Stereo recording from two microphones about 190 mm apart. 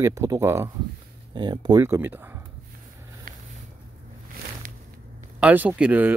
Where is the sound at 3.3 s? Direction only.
50° right (ahead or behind).